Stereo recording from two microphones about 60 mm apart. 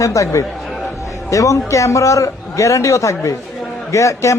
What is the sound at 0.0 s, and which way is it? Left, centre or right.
A man's voice, left.